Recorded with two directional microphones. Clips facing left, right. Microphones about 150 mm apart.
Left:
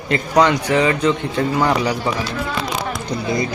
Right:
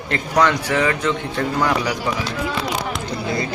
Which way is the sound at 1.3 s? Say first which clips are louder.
Left 2 dB; 30° left (ahead or behind).